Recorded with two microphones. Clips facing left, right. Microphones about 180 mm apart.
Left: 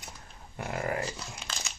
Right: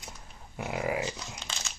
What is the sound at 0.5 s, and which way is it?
Speech, 5° right (ahead or behind).